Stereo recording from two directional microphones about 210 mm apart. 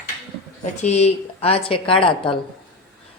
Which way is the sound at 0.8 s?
30° left (ahead or behind).